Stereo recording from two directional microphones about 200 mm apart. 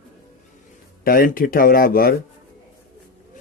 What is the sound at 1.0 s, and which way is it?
Speech, 45° left (ahead or behind).